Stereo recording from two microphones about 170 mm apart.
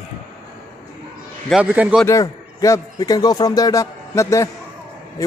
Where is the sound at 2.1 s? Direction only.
20° left (ahead or behind).